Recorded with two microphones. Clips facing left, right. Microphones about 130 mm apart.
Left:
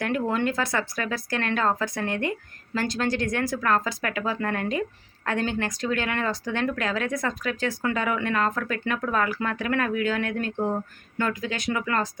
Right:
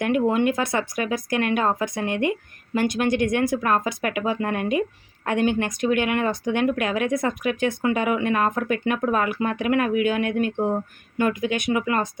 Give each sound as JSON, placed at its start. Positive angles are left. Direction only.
{"t": 0.0, "sound": "speech", "side_deg": -15}